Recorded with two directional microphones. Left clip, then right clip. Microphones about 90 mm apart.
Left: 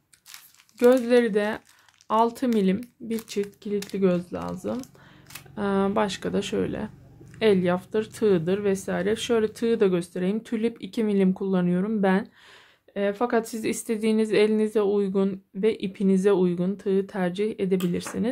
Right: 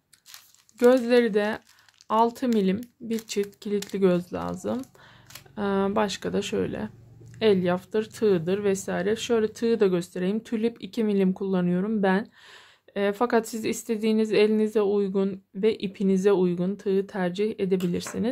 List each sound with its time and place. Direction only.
0.7 s speech: 40° right (ahead or behind)
3.3 s speech: 65° right (ahead or behind)
5.5 s speech: 30° right (ahead or behind)
8.5 s speech: 35° right (ahead or behind)
12.9 s speech: 90° right
13.3 s speech: 45° right (ahead or behind)
13.7 s speech: 25° right (ahead or behind)